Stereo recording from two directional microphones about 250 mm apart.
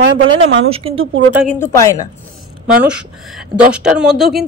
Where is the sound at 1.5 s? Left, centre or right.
Centre.